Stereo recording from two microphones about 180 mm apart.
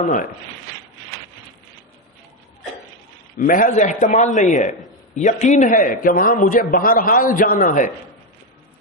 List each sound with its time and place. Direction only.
0.0 s a man's voice: 50° left (ahead or behind)
3.3 s a man's voice: 50° left (ahead or behind)